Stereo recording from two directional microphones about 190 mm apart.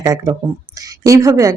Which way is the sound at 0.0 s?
15° right (ahead or behind).